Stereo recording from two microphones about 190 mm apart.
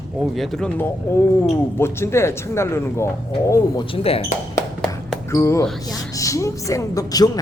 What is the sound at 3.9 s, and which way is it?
Speech, 30° left (ahead or behind).